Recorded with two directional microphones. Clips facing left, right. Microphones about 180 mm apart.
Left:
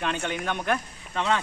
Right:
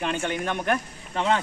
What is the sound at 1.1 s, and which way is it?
Speech, 30° right (ahead or behind).